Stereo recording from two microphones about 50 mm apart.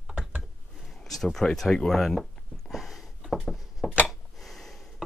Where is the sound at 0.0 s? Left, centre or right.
Centre.